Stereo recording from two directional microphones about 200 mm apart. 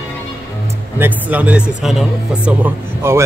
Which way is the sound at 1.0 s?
10° right (ahead or behind).